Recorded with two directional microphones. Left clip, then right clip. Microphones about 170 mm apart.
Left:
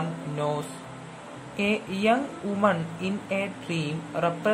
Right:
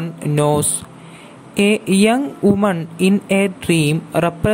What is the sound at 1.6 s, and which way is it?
Speech, 55° right (ahead or behind).